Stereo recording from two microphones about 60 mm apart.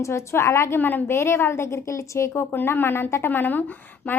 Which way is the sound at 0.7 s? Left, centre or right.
Left.